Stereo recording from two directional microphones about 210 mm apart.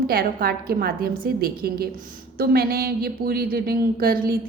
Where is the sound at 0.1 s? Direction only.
45° right (ahead or behind).